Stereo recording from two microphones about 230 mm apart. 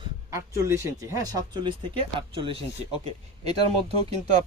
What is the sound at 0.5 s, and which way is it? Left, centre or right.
Speech, centre.